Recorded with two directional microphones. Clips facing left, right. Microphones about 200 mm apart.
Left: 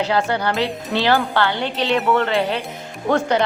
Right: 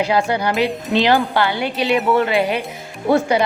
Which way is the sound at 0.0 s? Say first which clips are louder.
Right 2 dB; 10° right (ahead or behind).